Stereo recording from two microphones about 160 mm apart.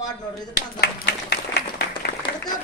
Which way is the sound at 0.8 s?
90° left.